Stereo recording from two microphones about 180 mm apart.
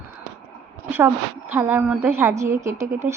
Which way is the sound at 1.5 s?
10° right (ahead or behind).